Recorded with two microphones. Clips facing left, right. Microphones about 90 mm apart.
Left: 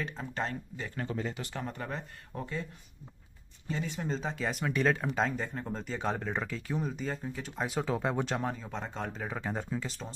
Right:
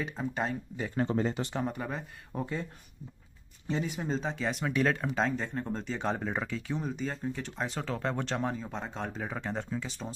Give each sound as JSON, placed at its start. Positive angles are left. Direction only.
{"t": 0.0, "sound": "speech", "side_deg": -10}
{"t": 0.8, "sound": "speech", "side_deg": -30}
{"t": 1.5, "sound": "speech", "side_deg": -20}
{"t": 1.8, "sound": "speech", "side_deg": -5}
{"t": 3.8, "sound": "speech", "side_deg": -5}
{"t": 8.4, "sound": "speech", "side_deg": 0}